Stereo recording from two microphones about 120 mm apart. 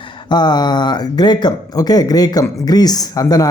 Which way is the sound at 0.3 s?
35° left (ahead or behind).